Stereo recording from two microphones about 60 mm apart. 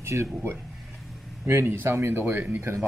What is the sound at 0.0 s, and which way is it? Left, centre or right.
Speech, right.